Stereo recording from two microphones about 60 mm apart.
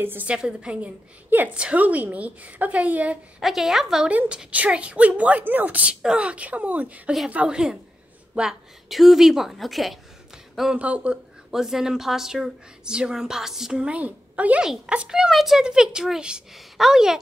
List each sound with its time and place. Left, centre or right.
0.0 s a woman's voice: right
0.3 s speech: centre
0.7 s speech: right
1.5 s speech: centre
3.3 s a woman's voice: centre
4.3 s a woman's voice: centre
10.7 s speech: centre
11.5 s speech: centre
13.8 s a woman's voice: right; by 17.2 s centre